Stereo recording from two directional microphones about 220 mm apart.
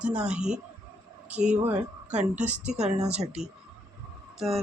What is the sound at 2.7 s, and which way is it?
Speech, 30° right (ahead or behind).